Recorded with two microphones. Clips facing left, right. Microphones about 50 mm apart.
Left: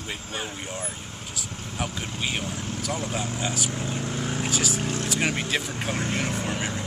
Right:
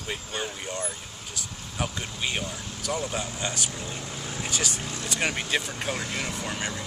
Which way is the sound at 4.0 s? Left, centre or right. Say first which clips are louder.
Left 6 dB; left.